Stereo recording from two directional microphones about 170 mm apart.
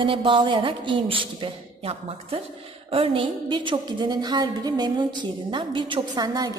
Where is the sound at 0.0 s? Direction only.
30° right (ahead or behind).